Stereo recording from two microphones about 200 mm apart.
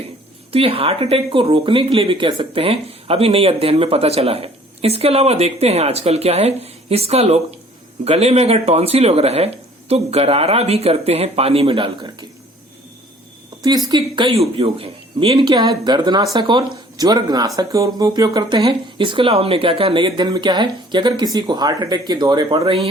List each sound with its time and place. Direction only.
0.5 s speech: 30° right (ahead or behind)
13.6 s speech: 20° right (ahead or behind)